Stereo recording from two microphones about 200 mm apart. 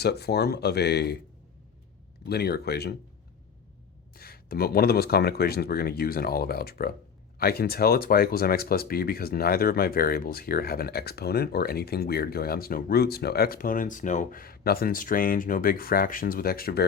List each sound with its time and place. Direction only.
0.0 s speech: 55° left (ahead or behind)
2.3 s speech: 50° left (ahead or behind)
4.1 s speech: 50° left (ahead or behind)